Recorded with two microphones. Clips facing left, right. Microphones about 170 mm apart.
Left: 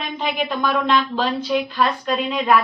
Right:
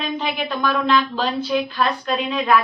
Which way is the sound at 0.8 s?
5° right (ahead or behind).